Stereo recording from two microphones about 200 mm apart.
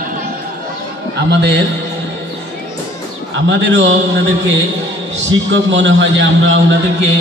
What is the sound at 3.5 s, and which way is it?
Speech, 65° right (ahead or behind).